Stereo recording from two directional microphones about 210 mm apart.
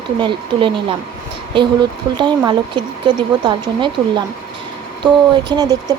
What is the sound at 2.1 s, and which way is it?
Speech, 20° right (ahead or behind).